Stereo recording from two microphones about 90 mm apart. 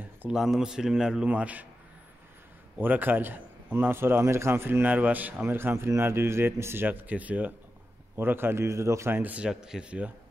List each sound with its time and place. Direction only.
0.3 s a man's voice: 5° right (ahead or behind)
2.8 s a man's voice: 20° right (ahead or behind)
9.2 s a man's voice: 15° right (ahead or behind)